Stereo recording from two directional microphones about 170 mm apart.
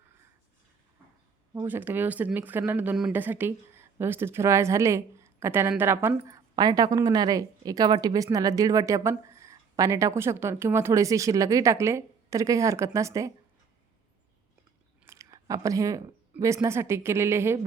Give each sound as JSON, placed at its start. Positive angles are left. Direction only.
{"t": 1.6, "sound": "speech", "side_deg": -10}
{"t": 15.0, "sound": "speech", "side_deg": -20}